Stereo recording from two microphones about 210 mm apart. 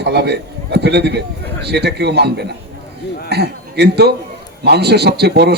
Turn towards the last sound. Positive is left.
turn(degrees=-50)  # may be behind; listen again after turning